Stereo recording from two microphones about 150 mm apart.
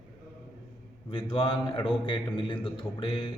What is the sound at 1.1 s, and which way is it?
A man's voice, 35° left (ahead or behind).